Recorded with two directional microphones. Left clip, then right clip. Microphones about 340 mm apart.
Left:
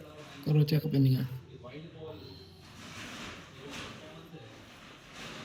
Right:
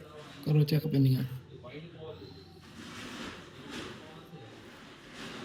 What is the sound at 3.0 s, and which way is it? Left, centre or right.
Vehicle, left.